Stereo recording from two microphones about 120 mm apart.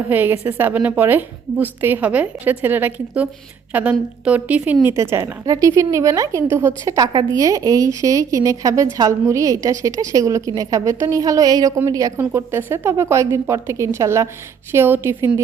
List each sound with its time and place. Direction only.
0.1 s a woman's voice: 15° right (ahead or behind)
4.9 s a woman's voice: 25° right (ahead or behind)
12.3 s a woman's voice: 20° right (ahead or behind)